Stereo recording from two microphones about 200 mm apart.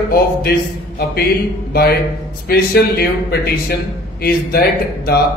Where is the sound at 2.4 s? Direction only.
50° left (ahead or behind).